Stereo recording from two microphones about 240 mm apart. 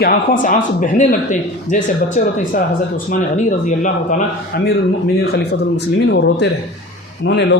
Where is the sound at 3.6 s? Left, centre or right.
Left.